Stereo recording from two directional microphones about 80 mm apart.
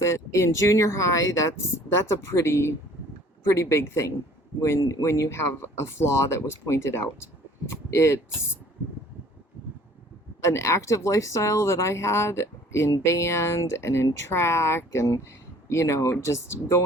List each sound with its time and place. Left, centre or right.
0.0 s a woman's voice: left
2.4 s a woman's voice: left
4.8 s a woman's voice: left
10.4 s a woman's voice: left